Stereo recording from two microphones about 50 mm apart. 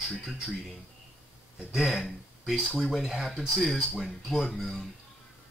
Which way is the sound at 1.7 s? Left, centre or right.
Centre.